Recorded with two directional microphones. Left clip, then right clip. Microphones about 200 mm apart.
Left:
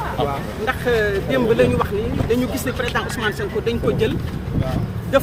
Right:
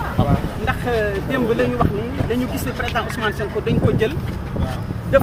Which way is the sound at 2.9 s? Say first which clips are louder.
Even; 10° left (ahead or behind).